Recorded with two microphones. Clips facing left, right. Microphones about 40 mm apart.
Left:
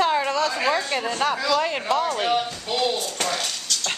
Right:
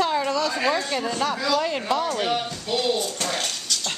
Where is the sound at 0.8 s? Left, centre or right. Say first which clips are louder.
Left 1 dB; centre.